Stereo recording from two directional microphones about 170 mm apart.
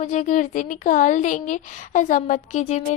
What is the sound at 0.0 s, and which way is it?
A woman's voice, 45° left (ahead or behind).